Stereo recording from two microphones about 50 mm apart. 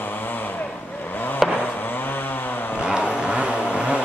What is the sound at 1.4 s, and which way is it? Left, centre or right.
Vehicle, centre.